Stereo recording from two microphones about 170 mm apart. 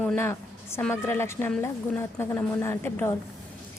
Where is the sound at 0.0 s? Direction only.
10° left (ahead or behind).